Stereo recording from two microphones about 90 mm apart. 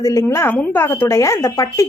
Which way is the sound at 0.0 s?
35° left (ahead or behind).